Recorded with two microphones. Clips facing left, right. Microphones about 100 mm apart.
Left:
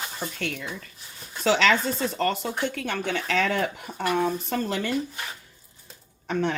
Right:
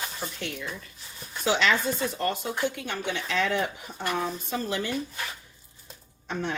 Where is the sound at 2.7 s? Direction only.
60° left (ahead or behind).